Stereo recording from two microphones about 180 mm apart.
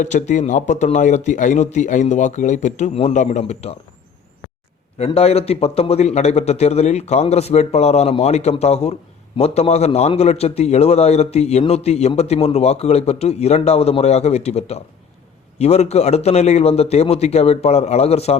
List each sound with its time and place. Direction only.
0.0 s a man's voice: 40° left (ahead or behind)
4.9 s a man's voice: 35° left (ahead or behind)